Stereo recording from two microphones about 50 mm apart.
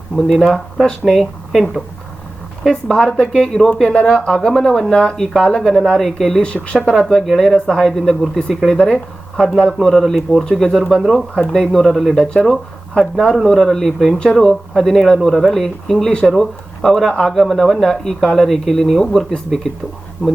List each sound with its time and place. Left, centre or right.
0.3 s speech: centre
2.6 s speech: centre
4.9 s speech: centre
11.5 s speech: centre
15.3 s speech: centre